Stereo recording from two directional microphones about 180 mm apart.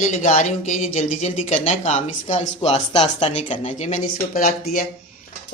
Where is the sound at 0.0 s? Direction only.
40° left (ahead or behind).